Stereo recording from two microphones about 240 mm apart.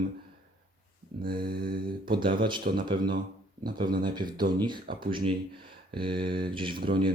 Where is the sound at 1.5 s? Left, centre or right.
Right.